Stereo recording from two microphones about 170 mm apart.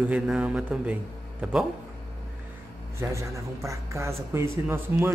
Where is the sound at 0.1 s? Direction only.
5° right (ahead or behind).